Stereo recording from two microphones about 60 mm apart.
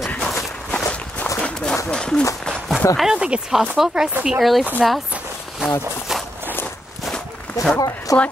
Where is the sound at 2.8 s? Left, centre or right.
Left.